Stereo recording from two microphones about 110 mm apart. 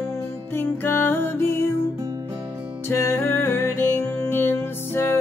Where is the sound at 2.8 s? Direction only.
20° left (ahead or behind).